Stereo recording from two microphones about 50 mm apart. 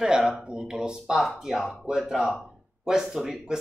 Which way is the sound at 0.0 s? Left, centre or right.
Centre.